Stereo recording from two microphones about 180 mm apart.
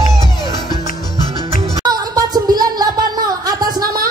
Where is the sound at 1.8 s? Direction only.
20° right (ahead or behind).